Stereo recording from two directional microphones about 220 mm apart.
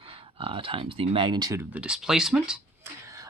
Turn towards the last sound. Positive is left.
turn(degrees=-15)  # may be behind; listen again after turning